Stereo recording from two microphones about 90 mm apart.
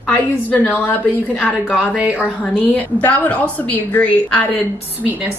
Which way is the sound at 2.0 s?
15° right (ahead or behind).